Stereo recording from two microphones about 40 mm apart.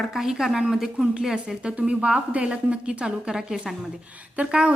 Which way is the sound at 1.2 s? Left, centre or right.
Right.